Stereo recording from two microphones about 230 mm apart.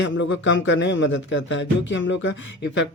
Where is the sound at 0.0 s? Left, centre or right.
Left.